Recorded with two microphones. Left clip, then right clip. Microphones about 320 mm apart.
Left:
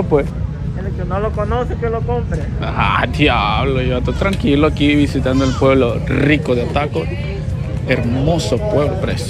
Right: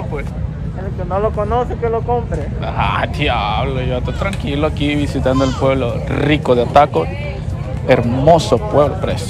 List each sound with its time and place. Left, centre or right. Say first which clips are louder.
1.1 s speech: right 3 dB; right
2.8 s speech: left 3 dB; centre